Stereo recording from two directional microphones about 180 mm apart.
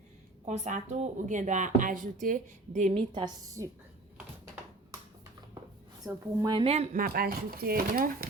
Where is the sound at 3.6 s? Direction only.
15° right (ahead or behind).